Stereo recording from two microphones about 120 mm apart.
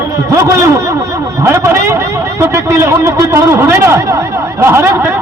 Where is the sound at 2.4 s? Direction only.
20° right (ahead or behind).